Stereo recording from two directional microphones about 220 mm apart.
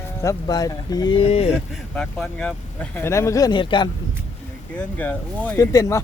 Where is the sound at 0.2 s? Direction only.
15° left (ahead or behind).